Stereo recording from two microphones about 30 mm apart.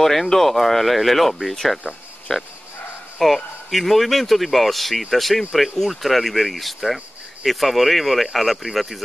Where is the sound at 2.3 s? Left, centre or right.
Centre.